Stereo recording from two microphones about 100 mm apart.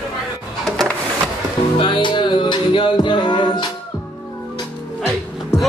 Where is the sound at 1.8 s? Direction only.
55° left (ahead or behind).